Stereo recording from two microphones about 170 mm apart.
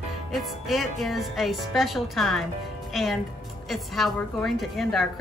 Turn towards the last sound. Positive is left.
turn(degrees=0)  # may be behind; listen again after turning